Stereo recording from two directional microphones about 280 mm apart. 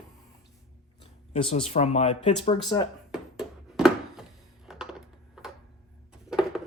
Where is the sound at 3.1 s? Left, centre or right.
Centre.